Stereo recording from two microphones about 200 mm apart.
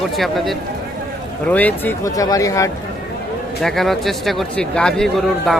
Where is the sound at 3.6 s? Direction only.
Centre (ahead or behind).